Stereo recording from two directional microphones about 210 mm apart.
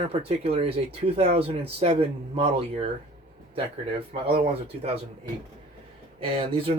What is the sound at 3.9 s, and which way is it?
Speech, 30° right (ahead or behind).